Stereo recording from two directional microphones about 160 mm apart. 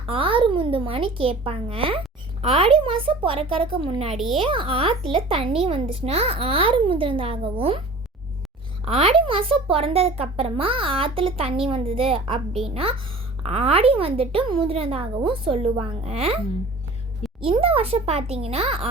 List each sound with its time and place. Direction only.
0.0 s a child's voice: 35° right (ahead or behind)
4.1 s a child's voice: centre (ahead or behind)
4.4 s a child's voice: 35° right (ahead or behind)
8.8 s a child's voice: 35° right (ahead or behind)
17.4 s a child's voice: 35° right (ahead or behind)